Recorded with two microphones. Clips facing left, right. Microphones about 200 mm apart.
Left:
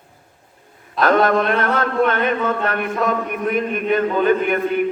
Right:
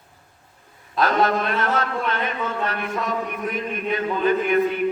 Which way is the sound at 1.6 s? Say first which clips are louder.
Left 6 dB; 55° left (ahead or behind).